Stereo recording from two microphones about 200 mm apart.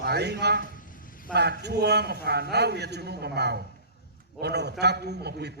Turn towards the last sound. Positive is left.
turn(degrees=-55)  # may be behind; listen again after turning